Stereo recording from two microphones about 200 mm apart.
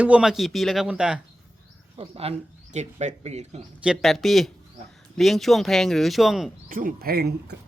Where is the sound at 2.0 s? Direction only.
30° right (ahead or behind).